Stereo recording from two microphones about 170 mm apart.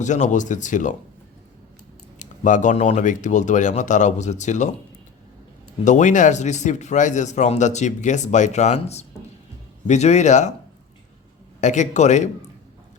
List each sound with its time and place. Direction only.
0.0 s speech: 45° left (ahead or behind)
2.1 s speech: 45° left (ahead or behind)
5.8 s speech: 45° left (ahead or behind)
11.6 s speech: 45° left (ahead or behind)